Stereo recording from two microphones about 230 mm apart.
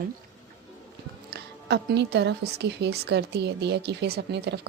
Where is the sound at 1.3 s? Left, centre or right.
Right.